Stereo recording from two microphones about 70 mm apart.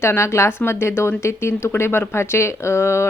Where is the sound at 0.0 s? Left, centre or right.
Left.